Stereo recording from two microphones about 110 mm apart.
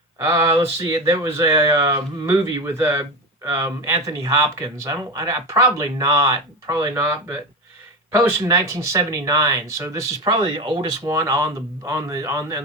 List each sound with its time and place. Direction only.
0.3 s speech: 25° right (ahead or behind)
8.4 s speech: 30° right (ahead or behind)
10.2 s speech: 45° right (ahead or behind)
11.1 s speech: 30° right (ahead or behind)